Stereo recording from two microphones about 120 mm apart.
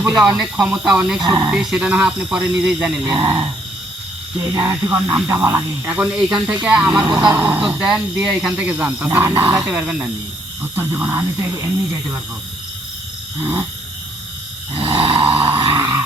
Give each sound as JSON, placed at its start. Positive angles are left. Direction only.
{"t": 0.2, "sound": "speech", "side_deg": -5}
{"t": 1.2, "sound": "speech", "side_deg": -35}
{"t": 1.5, "sound": "speech", "side_deg": -10}
{"t": 3.0, "sound": "speech", "side_deg": -30}
{"t": 7.0, "sound": "speech", "side_deg": -30}
{"t": 7.3, "sound": "speech", "side_deg": -15}
{"t": 13.4, "sound": "speech", "side_deg": -20}
{"t": 14.7, "sound": "snoring", "side_deg": -45}
{"t": 15.7, "sound": "a sound", "side_deg": -20}